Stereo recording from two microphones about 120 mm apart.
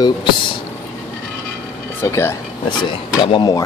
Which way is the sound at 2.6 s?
40° left (ahead or behind).